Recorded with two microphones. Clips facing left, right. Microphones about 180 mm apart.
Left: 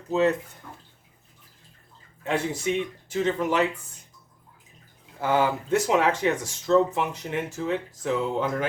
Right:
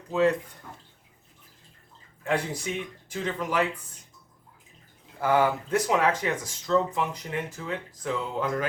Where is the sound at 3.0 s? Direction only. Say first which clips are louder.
Left 6 dB; 25° left (ahead or behind).